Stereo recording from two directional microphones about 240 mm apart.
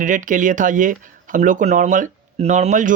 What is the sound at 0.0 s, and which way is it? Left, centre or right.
Speech, right.